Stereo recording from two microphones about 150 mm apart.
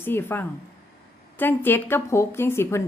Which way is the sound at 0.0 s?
15° left (ahead or behind).